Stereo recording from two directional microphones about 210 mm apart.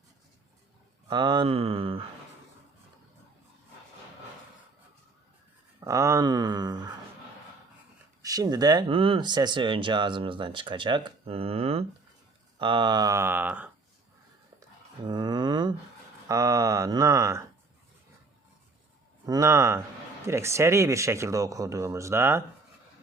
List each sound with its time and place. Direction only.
1.0 s speech: 20° right (ahead or behind)
5.8 s speech: 15° right (ahead or behind)
8.2 s speech: 15° right (ahead or behind)
14.6 s speech: 20° right (ahead or behind)
19.2 s speech: 15° right (ahead or behind)